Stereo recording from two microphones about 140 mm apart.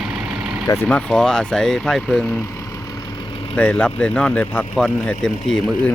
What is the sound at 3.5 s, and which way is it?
Speech, 10° left (ahead or behind).